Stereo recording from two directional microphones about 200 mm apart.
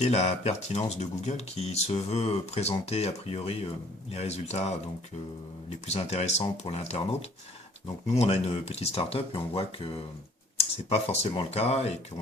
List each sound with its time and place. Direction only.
0.0 s speech: 35° left (ahead or behind)
5.8 s speech: 30° left (ahead or behind)